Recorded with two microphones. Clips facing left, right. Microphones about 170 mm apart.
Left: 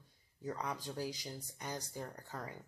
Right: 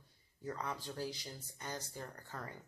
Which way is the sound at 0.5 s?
15° left (ahead or behind).